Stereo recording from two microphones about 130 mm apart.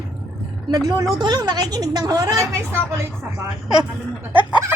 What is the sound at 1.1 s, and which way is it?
A woman's voice, 30° right (ahead or behind).